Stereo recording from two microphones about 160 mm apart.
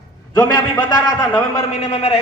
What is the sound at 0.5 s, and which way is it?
Speech, 25° left (ahead or behind).